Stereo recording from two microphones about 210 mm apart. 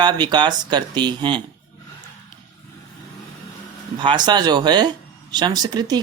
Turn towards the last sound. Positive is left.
turn(degrees=-20)  # may be behind; listen again after turning